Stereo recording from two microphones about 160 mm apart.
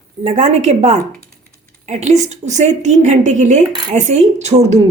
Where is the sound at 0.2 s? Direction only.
45° right (ahead or behind).